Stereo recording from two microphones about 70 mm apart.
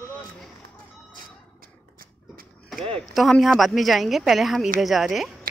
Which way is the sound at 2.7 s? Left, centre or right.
Centre.